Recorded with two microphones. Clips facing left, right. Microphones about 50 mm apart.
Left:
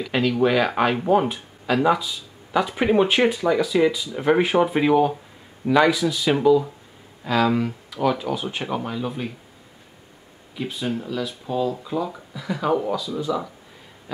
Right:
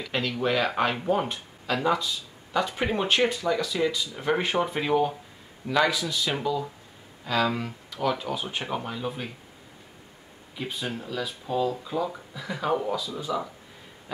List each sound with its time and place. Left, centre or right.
0.0 s speech: centre
10.5 s speech: centre